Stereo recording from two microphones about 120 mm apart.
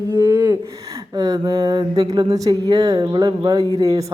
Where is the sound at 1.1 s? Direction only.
35° right (ahead or behind).